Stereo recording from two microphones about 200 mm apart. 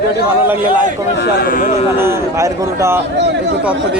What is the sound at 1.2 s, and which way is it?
Speech, 50° left (ahead or behind).